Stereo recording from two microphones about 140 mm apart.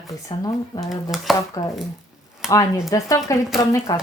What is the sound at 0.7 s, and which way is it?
Speech, 35° left (ahead or behind).